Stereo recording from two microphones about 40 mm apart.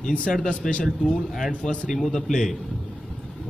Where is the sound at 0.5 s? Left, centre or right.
Left.